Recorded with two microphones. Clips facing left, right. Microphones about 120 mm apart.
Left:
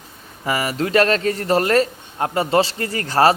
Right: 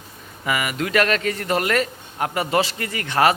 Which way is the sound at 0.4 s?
30° left (ahead or behind).